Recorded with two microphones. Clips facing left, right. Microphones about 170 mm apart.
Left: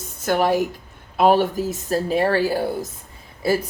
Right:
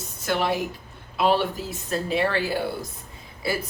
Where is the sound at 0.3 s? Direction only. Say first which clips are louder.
Left 6 dB; 45° left (ahead or behind).